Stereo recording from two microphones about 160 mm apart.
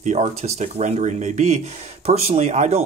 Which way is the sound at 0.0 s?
45° right (ahead or behind).